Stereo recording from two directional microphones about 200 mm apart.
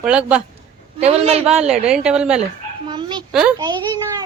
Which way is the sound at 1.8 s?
5° right (ahead or behind).